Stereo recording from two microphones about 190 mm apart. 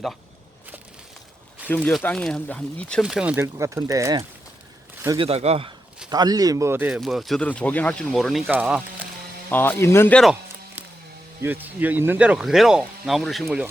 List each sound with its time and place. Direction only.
1.7 s speech: 10° left (ahead or behind); by 4.2 s 20° right (ahead or behind)
5.0 s speech: 30° right (ahead or behind)
6.1 s speech: 20° right (ahead or behind)
9.5 s speech: 10° left (ahead or behind)
11.4 s speech: 10° right (ahead or behind)